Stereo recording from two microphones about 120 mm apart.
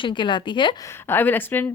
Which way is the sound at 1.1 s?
15° left (ahead or behind).